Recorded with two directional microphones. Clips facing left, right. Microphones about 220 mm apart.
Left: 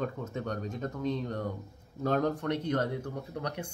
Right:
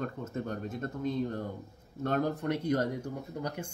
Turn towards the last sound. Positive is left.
turn(degrees=-5)  # may be behind; listen again after turning